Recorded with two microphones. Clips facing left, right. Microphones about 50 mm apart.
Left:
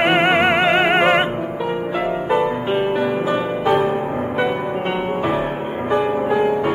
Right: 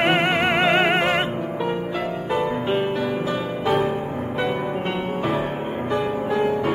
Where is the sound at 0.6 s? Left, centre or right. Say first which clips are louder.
Left 2 dB; centre.